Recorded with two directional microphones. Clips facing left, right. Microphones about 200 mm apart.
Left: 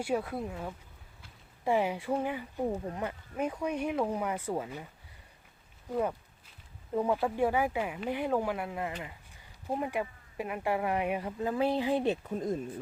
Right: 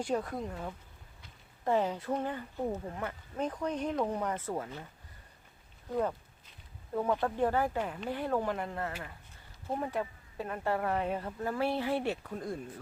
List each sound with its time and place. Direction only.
0.0 s speech: 5° left (ahead or behind)
5.9 s speech: 5° left (ahead or behind)